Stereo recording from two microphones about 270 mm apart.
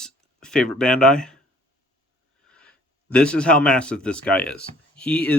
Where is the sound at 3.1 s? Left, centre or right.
Centre.